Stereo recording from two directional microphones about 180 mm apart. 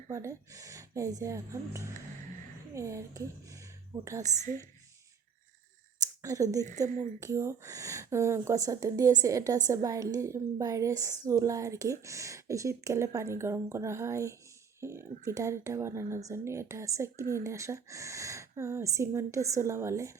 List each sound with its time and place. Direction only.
0.1 s a woman's voice: 15° right (ahead or behind)
4.2 s a woman's voice: 40° right (ahead or behind)
6.0 s a sound: 20° right (ahead or behind)
6.8 s speech: 40° right (ahead or behind)
7.2 s a woman's voice: 15° right (ahead or behind)